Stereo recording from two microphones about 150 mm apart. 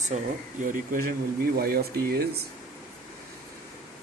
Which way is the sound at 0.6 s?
60° right (ahead or behind).